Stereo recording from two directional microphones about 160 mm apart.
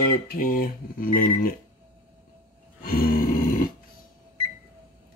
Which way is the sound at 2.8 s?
65° left (ahead or behind).